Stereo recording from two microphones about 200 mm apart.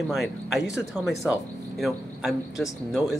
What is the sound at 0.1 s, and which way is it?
Speech, centre (ahead or behind).